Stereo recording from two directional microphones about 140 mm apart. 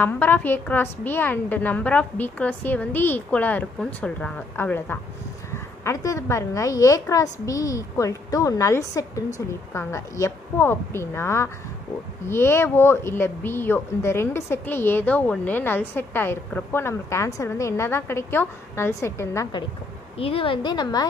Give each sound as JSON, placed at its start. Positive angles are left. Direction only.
{"t": 0.0, "sound": "a woman's voice", "side_deg": 15}
{"t": 20.2, "sound": "a woman's voice", "side_deg": 40}